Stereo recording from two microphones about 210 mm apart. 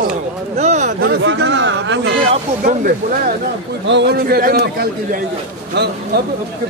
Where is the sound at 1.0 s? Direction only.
55° right (ahead or behind).